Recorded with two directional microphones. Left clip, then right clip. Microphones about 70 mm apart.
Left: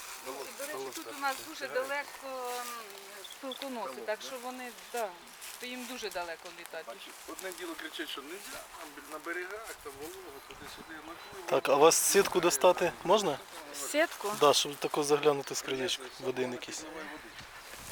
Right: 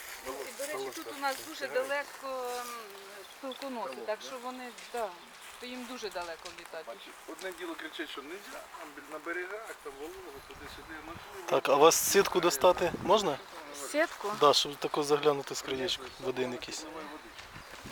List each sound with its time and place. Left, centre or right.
0.3 s speech: left
7.4 s speech: left
11.4 s speech: centre
13.7 s speech: left
14.4 s speech: centre
16.4 s speech: centre